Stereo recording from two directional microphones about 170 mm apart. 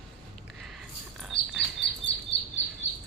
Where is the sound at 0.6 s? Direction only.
Centre (ahead or behind).